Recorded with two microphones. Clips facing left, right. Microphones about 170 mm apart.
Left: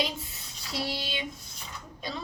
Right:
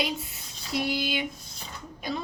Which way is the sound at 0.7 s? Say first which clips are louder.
Right 5 dB; 15° right (ahead or behind).